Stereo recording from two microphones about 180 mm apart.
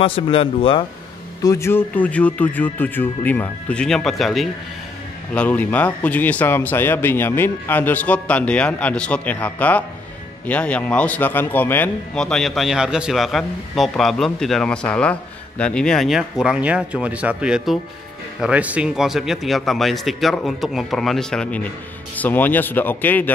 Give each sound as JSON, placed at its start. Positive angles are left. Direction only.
{"t": 0.0, "sound": "speech", "side_deg": 30}
{"t": 1.4, "sound": "a man's voice", "side_deg": 15}